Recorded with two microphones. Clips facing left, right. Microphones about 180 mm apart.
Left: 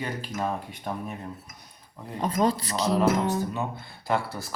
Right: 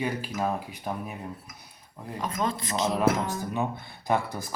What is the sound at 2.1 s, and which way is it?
Speech, 35° left (ahead or behind).